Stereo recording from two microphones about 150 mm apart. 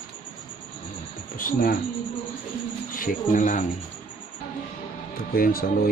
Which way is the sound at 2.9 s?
65° left (ahead or behind).